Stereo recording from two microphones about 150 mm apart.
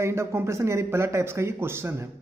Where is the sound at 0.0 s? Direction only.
20° right (ahead or behind).